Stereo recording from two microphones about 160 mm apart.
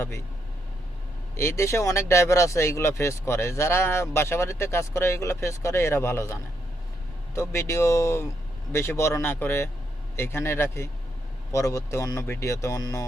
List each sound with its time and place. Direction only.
1.4 s speech: 15° left (ahead or behind)